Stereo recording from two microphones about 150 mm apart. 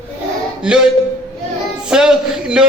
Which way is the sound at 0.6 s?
5° right (ahead or behind).